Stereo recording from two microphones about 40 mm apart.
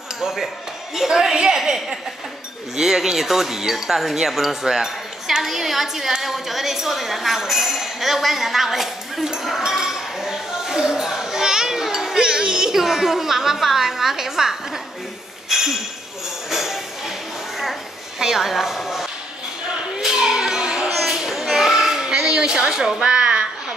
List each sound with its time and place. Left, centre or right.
0.2 s speech: centre
9.7 s children playing: centre
15.5 s speech: centre
16.4 s tambourine: centre
18.2 s a woman's voice: centre
20.0 s music: centre
20.8 s a sound: centre
21.3 s child singing: centre
22.0 s a sound: centre